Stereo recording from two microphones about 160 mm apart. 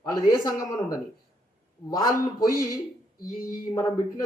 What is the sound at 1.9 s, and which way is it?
Speech, 25° left (ahead or behind).